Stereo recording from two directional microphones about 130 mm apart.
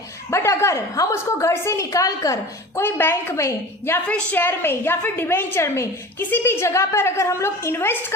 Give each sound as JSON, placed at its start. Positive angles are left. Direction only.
{"t": 0.3, "sound": "a woman's voice", "side_deg": 20}